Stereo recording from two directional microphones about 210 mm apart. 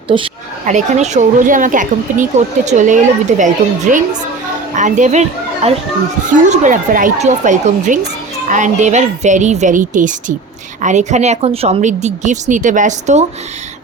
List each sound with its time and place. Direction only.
0.1 s speech: 25° right (ahead or behind)